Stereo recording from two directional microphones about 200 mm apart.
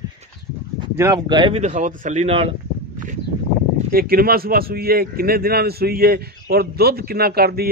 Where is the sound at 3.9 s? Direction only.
50° right (ahead or behind).